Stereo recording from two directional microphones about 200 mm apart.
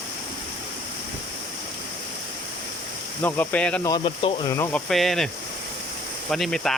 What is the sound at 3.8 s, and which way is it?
Speech, 20° left (ahead or behind).